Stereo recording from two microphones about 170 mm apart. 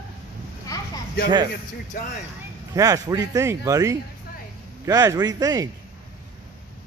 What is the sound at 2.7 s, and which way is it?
Speech, 20° right (ahead or behind).